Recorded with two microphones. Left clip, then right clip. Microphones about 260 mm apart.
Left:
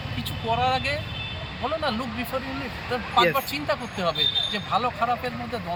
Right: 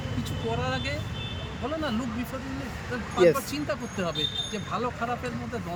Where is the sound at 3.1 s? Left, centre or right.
Centre.